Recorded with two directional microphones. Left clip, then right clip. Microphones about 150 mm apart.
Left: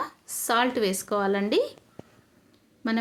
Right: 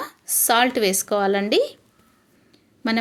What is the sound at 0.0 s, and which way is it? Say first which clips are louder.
A woman's voice: right 5 dB; 30° right (ahead or behind).